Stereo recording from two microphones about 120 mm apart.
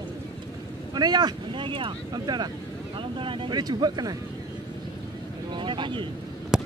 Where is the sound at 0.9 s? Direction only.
35° right (ahead or behind).